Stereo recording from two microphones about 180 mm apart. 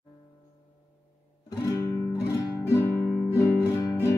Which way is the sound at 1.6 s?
15° left (ahead or behind).